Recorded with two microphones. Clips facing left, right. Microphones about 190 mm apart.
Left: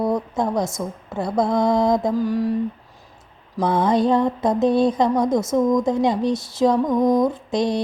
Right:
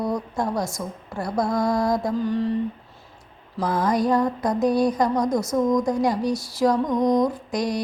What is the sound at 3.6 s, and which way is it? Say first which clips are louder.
Mantra: left 4 dB; 25° left (ahead or behind).